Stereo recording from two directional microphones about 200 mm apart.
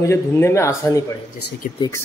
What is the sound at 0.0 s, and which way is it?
Speech, 15° left (ahead or behind).